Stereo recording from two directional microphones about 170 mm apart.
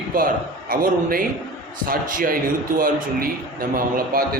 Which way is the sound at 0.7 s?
60° right (ahead or behind).